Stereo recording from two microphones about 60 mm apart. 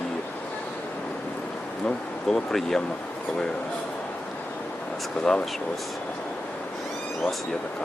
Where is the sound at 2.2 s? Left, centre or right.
Centre.